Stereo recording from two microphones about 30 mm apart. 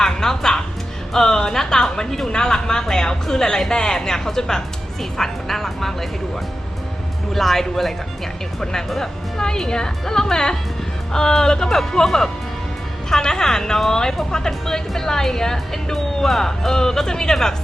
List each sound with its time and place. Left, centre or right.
0.0 s music: centre
1.1 s speech: left
7.3 s speech: centre
9.4 s speech: left